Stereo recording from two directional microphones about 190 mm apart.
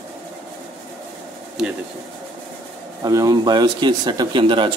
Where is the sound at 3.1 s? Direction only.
20° right (ahead or behind).